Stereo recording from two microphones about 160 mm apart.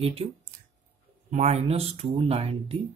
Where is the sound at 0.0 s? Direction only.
40° right (ahead or behind).